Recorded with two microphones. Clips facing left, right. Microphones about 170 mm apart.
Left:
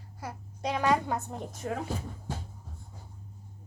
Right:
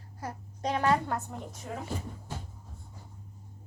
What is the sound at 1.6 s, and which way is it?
Speech, 60° left (ahead or behind).